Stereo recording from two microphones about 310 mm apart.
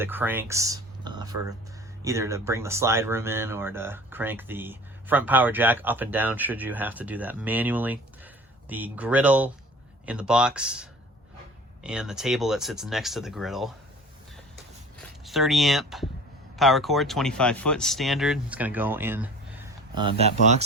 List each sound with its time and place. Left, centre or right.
0.0 s speech: centre
15.2 s speech: centre